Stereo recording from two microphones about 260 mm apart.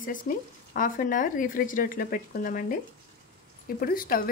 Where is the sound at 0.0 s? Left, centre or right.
Left.